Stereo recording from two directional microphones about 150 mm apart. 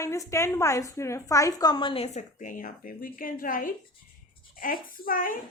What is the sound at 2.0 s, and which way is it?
A woman's voice, 55° left (ahead or behind).